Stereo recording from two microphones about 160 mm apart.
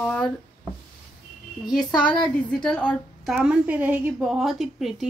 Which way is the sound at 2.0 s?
30° left (ahead or behind).